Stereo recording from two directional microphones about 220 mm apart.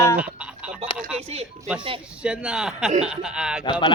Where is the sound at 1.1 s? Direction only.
30° right (ahead or behind).